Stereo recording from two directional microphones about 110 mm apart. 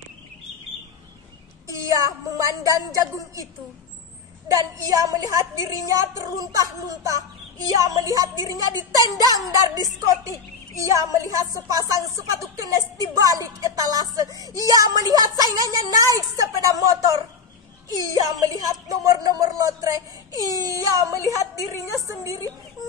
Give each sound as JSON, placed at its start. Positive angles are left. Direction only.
{"t": 1.7, "sound": "a sound", "side_deg": -30}
{"t": 4.5, "sound": "speech", "side_deg": -30}
{"t": 21.4, "sound": "a woman's voice", "side_deg": 30}
{"t": 21.9, "sound": "speech", "side_deg": -30}